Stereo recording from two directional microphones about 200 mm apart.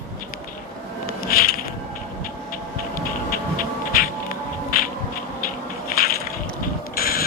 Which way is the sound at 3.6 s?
45° left (ahead or behind).